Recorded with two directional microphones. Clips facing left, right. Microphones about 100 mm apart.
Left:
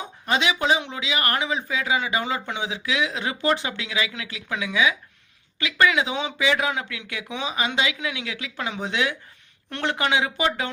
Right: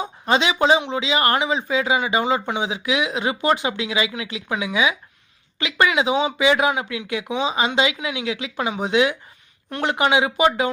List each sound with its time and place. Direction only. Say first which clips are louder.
0.0 s speech: right 4 dB; 25° right (ahead or behind)